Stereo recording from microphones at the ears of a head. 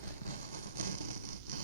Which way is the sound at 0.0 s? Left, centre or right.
Right.